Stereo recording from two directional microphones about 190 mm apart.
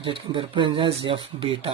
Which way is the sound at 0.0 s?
25° right (ahead or behind).